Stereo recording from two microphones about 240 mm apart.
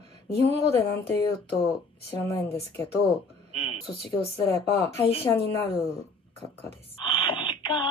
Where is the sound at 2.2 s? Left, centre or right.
Centre.